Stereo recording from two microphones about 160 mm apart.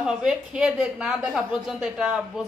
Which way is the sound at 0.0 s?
5° right (ahead or behind).